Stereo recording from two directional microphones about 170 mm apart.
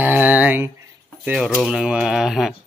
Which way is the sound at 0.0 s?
10° right (ahead or behind).